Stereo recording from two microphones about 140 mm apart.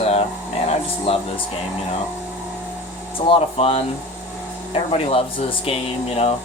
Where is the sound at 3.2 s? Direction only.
45° left (ahead or behind).